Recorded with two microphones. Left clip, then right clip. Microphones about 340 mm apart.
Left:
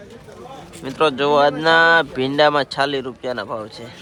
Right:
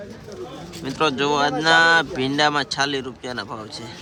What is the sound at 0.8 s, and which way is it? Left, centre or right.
Speech, centre.